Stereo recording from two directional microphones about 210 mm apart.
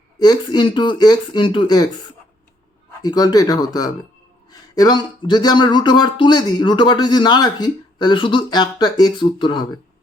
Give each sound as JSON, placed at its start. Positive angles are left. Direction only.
{"t": 0.2, "sound": "speech", "side_deg": 20}
{"t": 3.0, "sound": "speech", "side_deg": 20}